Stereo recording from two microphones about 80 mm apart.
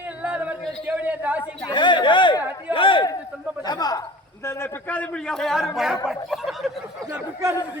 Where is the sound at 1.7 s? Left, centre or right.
Left.